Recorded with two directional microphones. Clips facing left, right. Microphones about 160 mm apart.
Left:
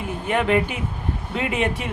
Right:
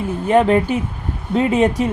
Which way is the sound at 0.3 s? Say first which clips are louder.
Right 7 dB; 40° right (ahead or behind).